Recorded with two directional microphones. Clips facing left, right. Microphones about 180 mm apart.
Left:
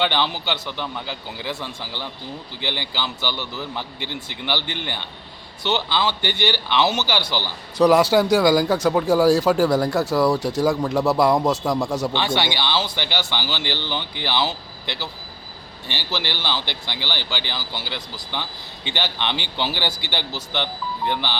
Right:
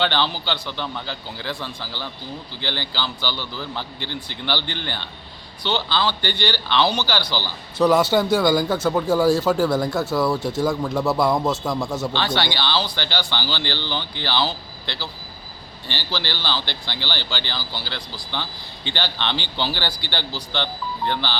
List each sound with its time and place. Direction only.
0.0 s speech: 15° left (ahead or behind)
16.0 s speech: 15° left (ahead or behind)